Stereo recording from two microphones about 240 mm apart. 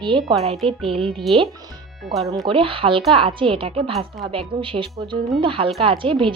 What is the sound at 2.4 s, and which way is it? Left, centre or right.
A woman's voice, right.